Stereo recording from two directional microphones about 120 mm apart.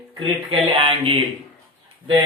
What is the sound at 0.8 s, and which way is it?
Speech, 50° right (ahead or behind).